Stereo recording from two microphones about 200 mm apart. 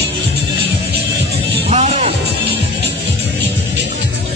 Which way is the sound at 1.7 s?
35° right (ahead or behind).